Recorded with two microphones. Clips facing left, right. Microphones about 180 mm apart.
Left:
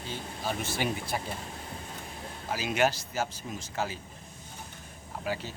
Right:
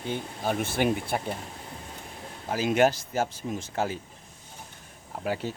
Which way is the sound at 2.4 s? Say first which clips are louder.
Right 5 dB; 50° right (ahead or behind).